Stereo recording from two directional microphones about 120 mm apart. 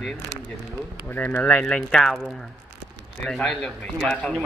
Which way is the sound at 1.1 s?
15° left (ahead or behind).